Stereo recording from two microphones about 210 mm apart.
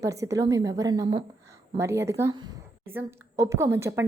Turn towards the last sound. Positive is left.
turn(degrees=-10)  # may be behind; listen again after turning